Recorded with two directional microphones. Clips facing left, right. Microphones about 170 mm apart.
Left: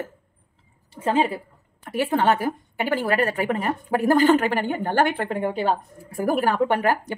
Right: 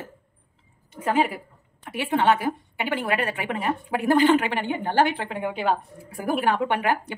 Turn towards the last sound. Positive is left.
turn(degrees=40)  # may be behind; listen again after turning